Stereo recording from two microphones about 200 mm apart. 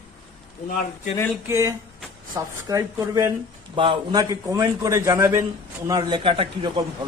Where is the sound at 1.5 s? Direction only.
15° right (ahead or behind).